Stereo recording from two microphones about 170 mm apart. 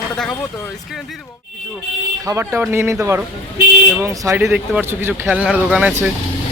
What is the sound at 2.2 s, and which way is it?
Speech, 15° right (ahead or behind).